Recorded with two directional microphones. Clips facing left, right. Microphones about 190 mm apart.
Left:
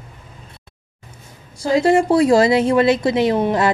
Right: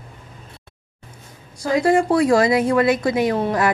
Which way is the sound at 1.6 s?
25° left (ahead or behind).